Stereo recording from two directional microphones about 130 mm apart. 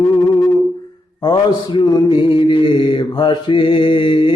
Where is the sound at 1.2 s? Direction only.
35° left (ahead or behind).